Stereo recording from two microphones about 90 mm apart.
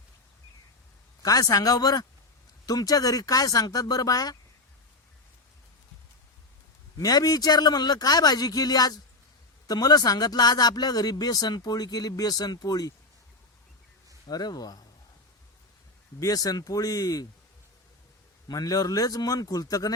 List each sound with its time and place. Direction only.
1.2 s speech: 40° left (ahead or behind)
7.0 s speech: 45° left (ahead or behind)
14.3 s speech: 45° left (ahead or behind)
16.2 s speech: 40° left (ahead or behind)
18.4 s speech: 45° left (ahead or behind)